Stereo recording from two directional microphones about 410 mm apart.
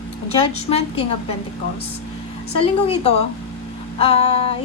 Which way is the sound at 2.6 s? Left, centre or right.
Centre.